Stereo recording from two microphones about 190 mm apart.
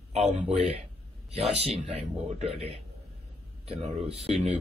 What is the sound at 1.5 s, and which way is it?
Speech, 30° right (ahead or behind).